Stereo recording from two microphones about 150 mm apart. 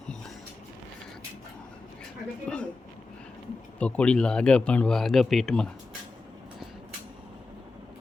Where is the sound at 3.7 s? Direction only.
10° left (ahead or behind).